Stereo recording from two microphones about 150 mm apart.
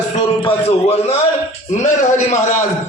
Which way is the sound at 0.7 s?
45° left (ahead or behind).